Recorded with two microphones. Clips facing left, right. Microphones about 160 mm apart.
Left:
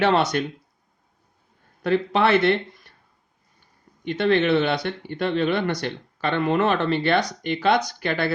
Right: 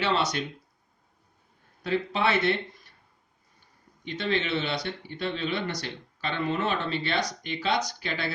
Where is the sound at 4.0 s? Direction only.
60° left (ahead or behind).